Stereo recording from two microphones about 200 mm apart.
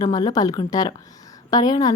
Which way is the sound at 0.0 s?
20° left (ahead or behind).